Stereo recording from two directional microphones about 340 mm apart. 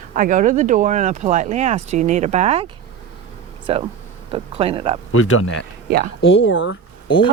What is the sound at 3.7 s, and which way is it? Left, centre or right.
Speech, centre.